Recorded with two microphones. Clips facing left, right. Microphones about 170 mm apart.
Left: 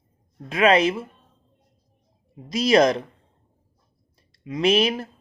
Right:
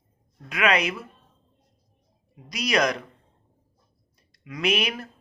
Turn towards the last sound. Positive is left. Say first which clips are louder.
# left 6 dB
turn(degrees=30)  # may be behind; listen again after turning